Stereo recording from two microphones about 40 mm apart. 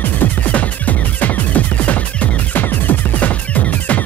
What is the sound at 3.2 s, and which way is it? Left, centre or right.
Music, left.